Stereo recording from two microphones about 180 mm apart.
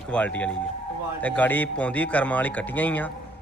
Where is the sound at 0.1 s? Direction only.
5° left (ahead or behind).